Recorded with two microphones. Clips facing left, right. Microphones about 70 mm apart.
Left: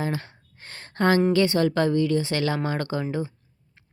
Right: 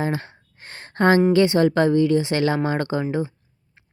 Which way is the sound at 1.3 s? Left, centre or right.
Right.